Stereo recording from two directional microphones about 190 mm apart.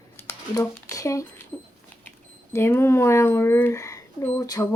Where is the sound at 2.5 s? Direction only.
15° left (ahead or behind).